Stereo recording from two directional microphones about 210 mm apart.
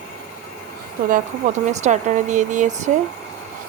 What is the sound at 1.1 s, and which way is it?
Speech, 35° right (ahead or behind).